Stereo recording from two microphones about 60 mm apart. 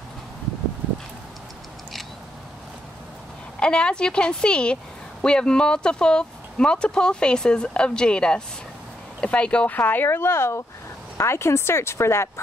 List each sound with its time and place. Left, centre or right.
3.5 s speech: centre
9.8 s speech: left